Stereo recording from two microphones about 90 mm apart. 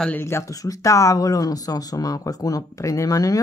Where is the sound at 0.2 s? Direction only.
30° left (ahead or behind).